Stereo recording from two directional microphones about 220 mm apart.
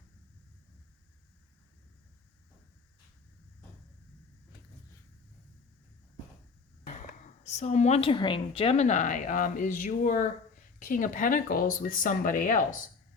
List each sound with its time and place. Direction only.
7.4 s a woman's voice: 30° left (ahead or behind)